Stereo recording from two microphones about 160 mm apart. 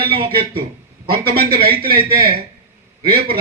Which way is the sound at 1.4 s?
70° right (ahead or behind).